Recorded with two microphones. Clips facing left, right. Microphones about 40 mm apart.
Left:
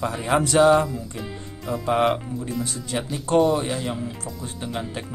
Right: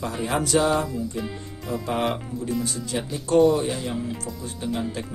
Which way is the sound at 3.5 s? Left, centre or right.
Centre.